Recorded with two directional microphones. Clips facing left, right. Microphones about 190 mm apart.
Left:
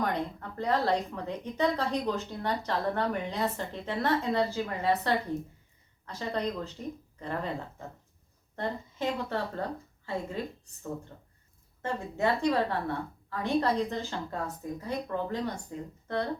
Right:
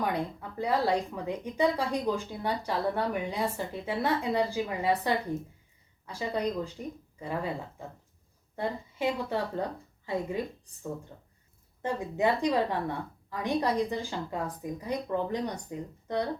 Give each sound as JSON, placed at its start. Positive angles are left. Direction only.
{"t": 0.0, "sound": "speech", "side_deg": -10}
{"t": 11.8, "sound": "speech", "side_deg": -15}